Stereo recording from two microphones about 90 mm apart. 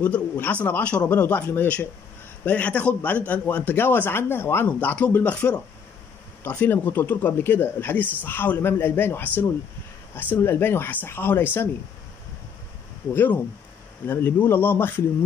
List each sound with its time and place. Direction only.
0.0 s speech: 15° left (ahead or behind)
13.1 s speech: 25° left (ahead or behind)